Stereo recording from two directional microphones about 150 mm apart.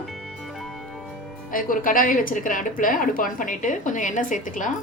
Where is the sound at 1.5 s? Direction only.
65° left (ahead or behind).